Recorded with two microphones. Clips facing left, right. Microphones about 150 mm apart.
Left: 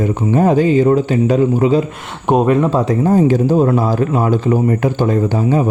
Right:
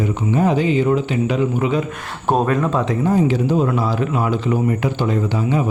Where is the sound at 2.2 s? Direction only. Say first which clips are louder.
Left 5 dB; 20° left (ahead or behind).